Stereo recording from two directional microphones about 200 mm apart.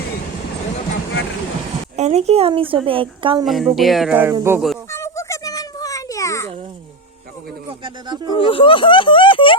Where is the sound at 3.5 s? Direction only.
Centre (ahead or behind).